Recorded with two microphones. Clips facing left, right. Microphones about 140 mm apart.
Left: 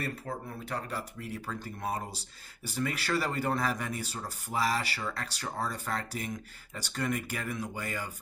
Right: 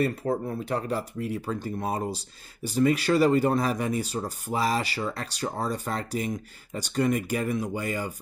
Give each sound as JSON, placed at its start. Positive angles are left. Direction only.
{"t": 0.3, "sound": "speech", "side_deg": -25}